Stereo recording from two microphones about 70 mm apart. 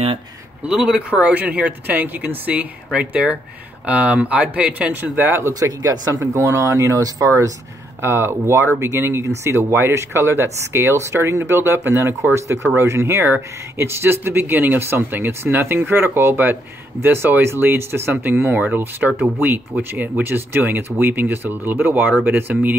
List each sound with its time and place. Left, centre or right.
0.7 s speech: centre; by 5.4 s right
5.5 s speech: right
8.0 s speech: right
18.1 s speech: right